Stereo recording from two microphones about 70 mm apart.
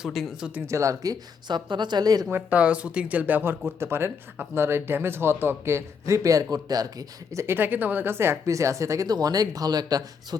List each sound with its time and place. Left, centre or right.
0.0 s speech: centre
0.7 s speech: right
1.5 s a woman's voice: right
2.3 s speech: centre; by 6.8 s right
7.3 s speech: right
9.0 s speech: right